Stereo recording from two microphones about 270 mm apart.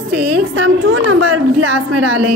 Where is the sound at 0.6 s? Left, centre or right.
Right.